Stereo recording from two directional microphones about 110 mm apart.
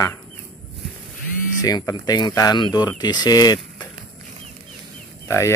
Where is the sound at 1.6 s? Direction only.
35° left (ahead or behind).